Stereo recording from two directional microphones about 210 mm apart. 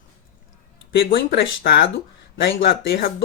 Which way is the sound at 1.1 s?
50° left (ahead or behind).